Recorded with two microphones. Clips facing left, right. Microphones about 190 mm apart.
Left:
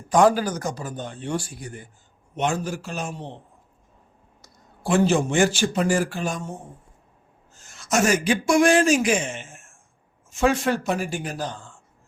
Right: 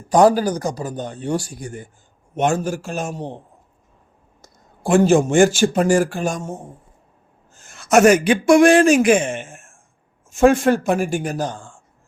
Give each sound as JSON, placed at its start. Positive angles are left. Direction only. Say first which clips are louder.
{"t": 0.1, "sound": "a man's voice", "louder": "right 4 dB", "side_deg": -40}
{"t": 4.4, "sound": "speech", "louder": "right 4 dB", "side_deg": -50}
{"t": 7.5, "sound": "a man's voice", "louder": "right 9 dB", "side_deg": -60}